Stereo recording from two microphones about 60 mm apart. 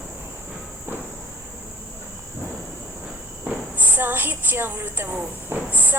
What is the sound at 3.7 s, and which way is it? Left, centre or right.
A woman's voice, right.